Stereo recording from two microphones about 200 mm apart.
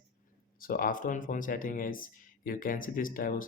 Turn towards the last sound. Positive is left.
turn(degrees=45)  # may be behind; listen again after turning